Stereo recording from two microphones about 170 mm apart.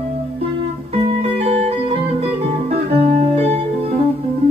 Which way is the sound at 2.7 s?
35° right (ahead or behind).